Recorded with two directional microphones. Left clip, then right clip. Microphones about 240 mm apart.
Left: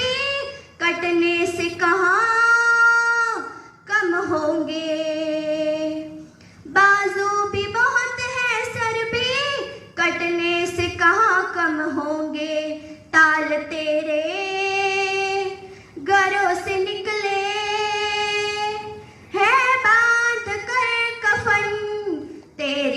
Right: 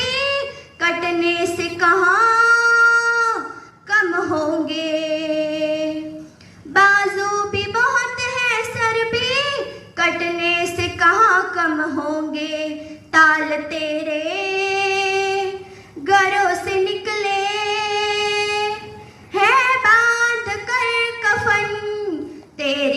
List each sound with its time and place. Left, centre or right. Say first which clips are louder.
0.0 s child singing: right 2 dB; centre
1.5 s singing: right 3 dB; centre
3.8 s a sound: right 3 dB; centre
13.1 s female singing: right 2 dB; centre
16.0 s child singing: right 2 dB; centre
19.3 s female singing: right 2 dB; centre
22.5 s a sound: right 3 dB; centre